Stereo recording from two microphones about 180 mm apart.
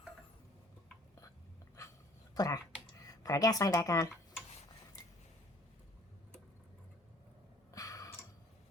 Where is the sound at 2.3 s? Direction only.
20° left (ahead or behind).